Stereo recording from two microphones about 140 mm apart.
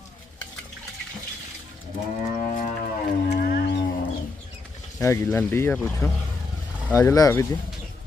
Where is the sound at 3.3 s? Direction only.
90° left.